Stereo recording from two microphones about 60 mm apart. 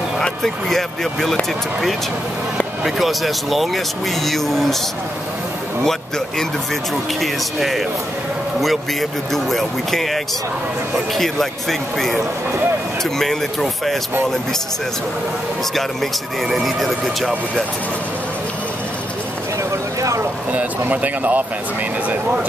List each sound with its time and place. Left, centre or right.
0.2 s speech: centre
2.8 s speech: centre
5.9 s speech: centre
9.3 s speech: centre
13.2 s speech: centre
15.7 s speech: centre
20.0 s a sound: right
20.5 s speech: right